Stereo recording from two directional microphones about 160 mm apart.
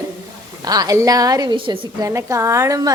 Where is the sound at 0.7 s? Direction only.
25° right (ahead or behind).